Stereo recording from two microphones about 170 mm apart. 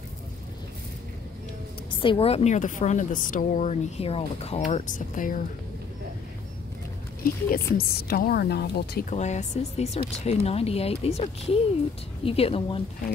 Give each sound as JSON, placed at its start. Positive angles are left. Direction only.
{"t": 1.9, "sound": "a woman's voice", "side_deg": 30}
{"t": 7.5, "sound": "a woman's voice", "side_deg": 60}
{"t": 9.1, "sound": "speech", "side_deg": 40}